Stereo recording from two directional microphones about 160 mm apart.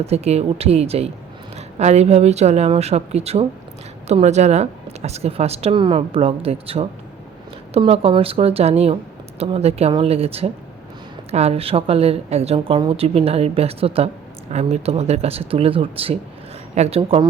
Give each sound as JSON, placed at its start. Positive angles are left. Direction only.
{"t": 0.0, "sound": "a woman's voice", "side_deg": -40}
{"t": 17.0, "sound": "a woman's voice", "side_deg": -30}